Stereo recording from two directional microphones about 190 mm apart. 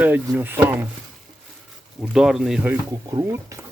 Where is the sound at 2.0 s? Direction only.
Centre (ahead or behind).